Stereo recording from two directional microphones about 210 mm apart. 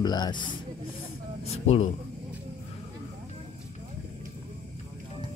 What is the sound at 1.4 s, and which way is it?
Speech, 30° left (ahead or behind).